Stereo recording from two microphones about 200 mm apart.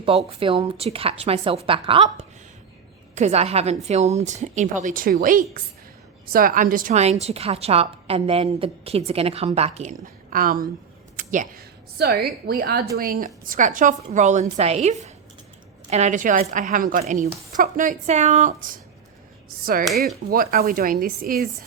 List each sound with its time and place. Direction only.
0.3 s a woman's voice: 25° right (ahead or behind)
20.3 s speech: 45° right (ahead or behind)